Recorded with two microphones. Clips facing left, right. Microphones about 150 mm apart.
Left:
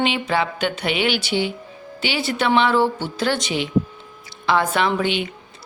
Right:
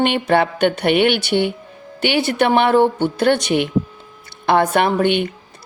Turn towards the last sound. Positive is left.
turn(degrees=-55)  # may be behind; listen again after turning